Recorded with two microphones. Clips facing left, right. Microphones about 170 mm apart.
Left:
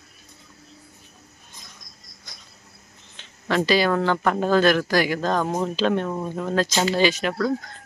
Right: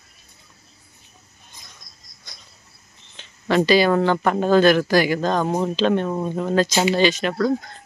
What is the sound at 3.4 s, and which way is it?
A man's voice, centre (ahead or behind).